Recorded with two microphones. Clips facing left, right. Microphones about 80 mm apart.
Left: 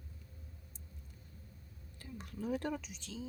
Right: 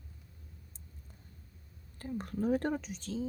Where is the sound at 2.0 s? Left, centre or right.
Right.